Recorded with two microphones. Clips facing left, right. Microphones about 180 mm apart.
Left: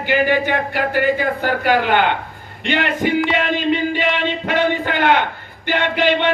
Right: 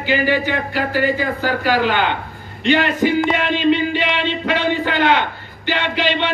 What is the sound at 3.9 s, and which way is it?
A man's voice, 50° left (ahead or behind).